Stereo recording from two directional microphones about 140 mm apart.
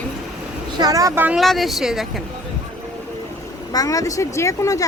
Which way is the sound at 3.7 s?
25° left (ahead or behind).